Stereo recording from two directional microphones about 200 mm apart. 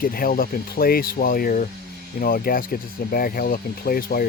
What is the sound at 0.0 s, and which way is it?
Speech, 45° left (ahead or behind).